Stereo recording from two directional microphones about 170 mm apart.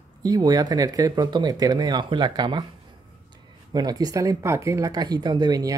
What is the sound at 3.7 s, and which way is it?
A man's voice, 25° right (ahead or behind).